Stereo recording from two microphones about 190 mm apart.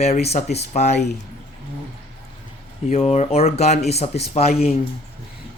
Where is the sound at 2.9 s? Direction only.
35° left (ahead or behind).